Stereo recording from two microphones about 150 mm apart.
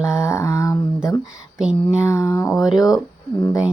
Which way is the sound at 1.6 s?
5° right (ahead or behind).